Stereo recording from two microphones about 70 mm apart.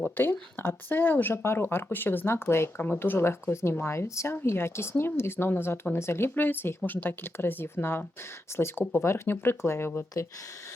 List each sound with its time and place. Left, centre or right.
0.2 s speech: left